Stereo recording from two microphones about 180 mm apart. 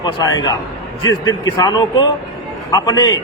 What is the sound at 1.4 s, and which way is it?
A man's voice, 20° left (ahead or behind).